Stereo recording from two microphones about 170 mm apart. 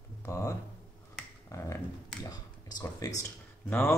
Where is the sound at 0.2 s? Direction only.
15° left (ahead or behind).